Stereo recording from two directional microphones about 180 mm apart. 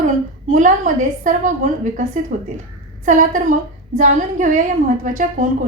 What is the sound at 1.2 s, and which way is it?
A woman's voice, 45° right (ahead or behind).